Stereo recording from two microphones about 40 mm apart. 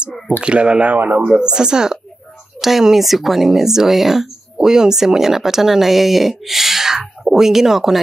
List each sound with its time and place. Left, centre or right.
0.4 s speech: right
2.6 s speech: centre